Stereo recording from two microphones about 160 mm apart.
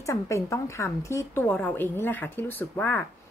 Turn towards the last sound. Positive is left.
turn(degrees=10)  # may be behind; listen again after turning